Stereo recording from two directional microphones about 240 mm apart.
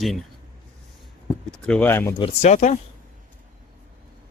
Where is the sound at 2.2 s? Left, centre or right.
Left.